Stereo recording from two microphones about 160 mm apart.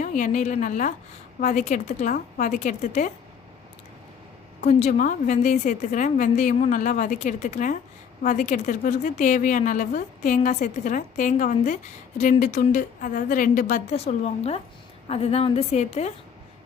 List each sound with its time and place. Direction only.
0.0 s speech: 50° left (ahead or behind)
4.6 s speech: 45° left (ahead or behind)
13.9 s a woman's voice: 40° left (ahead or behind)